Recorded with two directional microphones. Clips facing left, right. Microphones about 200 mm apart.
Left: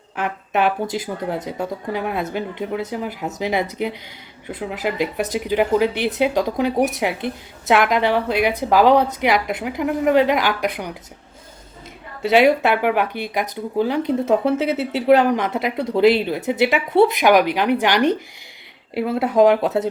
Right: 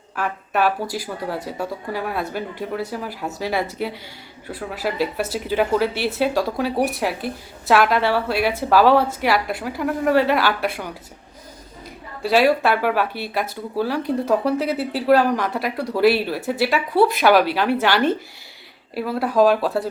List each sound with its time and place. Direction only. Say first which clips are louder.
0.2 s speech: left 1 dB; 20° left (ahead or behind)
12.2 s speech: left 2 dB; 20° left (ahead or behind)